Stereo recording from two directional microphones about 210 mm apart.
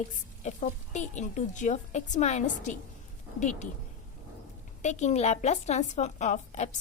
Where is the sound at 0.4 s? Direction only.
35° left (ahead or behind).